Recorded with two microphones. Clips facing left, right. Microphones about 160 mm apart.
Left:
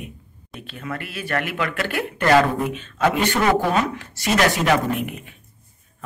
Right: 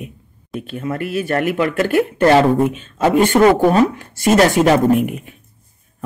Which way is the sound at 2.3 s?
25° right (ahead or behind).